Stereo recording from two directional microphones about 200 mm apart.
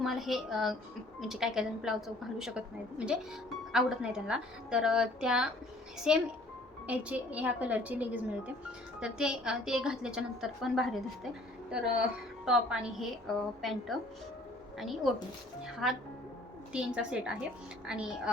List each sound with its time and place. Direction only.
0.0 s a woman's voice: centre (ahead or behind)
12.5 s a woman's voice: 5° right (ahead or behind)